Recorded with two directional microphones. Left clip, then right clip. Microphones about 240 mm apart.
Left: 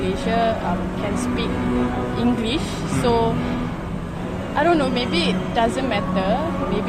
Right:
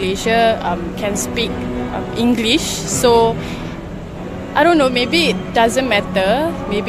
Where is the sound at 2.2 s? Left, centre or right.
Right.